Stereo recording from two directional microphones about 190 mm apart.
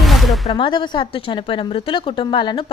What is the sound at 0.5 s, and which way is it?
A woman's voice, 25° left (ahead or behind).